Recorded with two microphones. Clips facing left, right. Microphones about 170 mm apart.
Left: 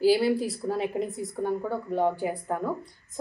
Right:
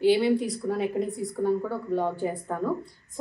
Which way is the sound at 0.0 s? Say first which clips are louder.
Right 1 dB; 35° left (ahead or behind).